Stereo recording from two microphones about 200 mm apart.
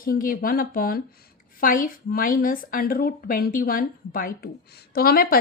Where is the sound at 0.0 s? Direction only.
45° left (ahead or behind).